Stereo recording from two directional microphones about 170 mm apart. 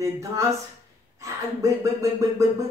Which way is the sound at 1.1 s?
20° right (ahead or behind).